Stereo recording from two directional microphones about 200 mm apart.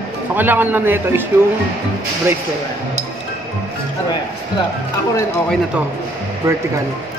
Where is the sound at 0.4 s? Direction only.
10° right (ahead or behind).